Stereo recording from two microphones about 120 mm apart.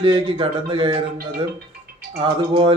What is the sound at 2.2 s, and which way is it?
Speech, 50° right (ahead or behind).